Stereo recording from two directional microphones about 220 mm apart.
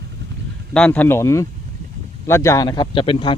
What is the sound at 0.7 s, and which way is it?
A man's voice, 5° left (ahead or behind).